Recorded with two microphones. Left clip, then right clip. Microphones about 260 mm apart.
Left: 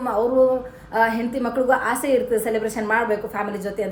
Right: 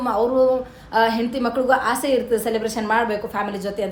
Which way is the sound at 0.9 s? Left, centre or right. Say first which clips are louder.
Right 1 dB; centre.